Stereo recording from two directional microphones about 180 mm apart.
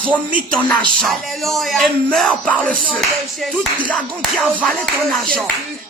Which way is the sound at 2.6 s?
50° right (ahead or behind).